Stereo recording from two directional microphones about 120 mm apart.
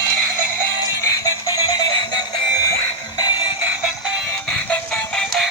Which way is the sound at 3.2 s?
35° left (ahead or behind).